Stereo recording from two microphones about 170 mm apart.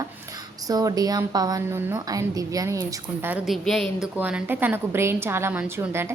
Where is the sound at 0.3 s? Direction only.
20° right (ahead or behind).